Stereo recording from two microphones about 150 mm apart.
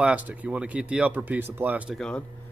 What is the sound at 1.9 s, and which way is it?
Speech, 5° left (ahead or behind).